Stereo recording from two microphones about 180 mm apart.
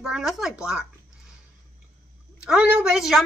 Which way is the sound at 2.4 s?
5° right (ahead or behind).